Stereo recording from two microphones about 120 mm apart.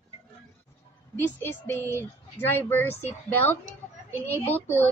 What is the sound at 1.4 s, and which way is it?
Speech, 20° left (ahead or behind).